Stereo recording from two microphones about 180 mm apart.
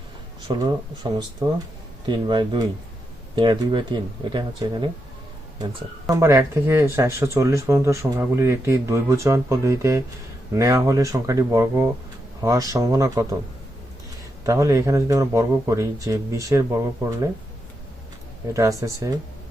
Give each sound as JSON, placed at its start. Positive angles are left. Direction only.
{"t": 0.5, "sound": "speech", "side_deg": -25}
{"t": 6.1, "sound": "speech", "side_deg": -15}
{"t": 14.4, "sound": "speech", "side_deg": -15}
{"t": 18.5, "sound": "speech", "side_deg": -15}